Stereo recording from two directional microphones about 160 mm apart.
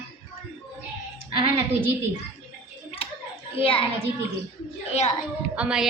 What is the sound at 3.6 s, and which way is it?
Speech, 35° left (ahead or behind).